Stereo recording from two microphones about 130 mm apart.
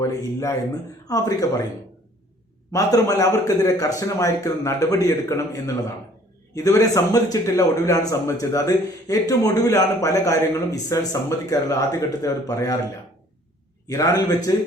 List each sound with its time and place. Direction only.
0.0 s a man's voice: 25° left (ahead or behind)
2.7 s a man's voice: 25° left (ahead or behind)
13.8 s a man's voice: 25° left (ahead or behind)